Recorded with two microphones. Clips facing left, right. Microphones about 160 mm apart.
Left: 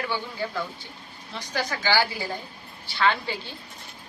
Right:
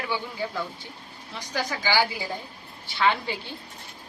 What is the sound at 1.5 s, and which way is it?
Speech, 10° right (ahead or behind).